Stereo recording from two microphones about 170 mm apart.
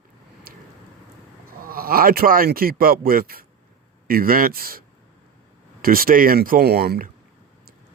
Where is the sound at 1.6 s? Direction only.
60° right (ahead or behind).